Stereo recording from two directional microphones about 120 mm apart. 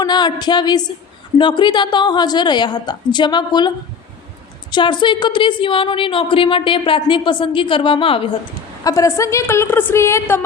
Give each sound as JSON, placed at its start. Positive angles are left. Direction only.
{"t": 0.0, "sound": "a woman's voice", "side_deg": 35}
{"t": 4.7, "sound": "a woman's voice", "side_deg": 40}
{"t": 8.8, "sound": "a woman's voice", "side_deg": 25}